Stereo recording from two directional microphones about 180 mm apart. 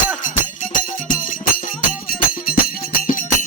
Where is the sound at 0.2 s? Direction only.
45° left (ahead or behind).